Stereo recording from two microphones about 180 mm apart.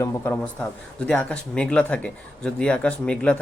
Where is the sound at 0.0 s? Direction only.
15° left (ahead or behind).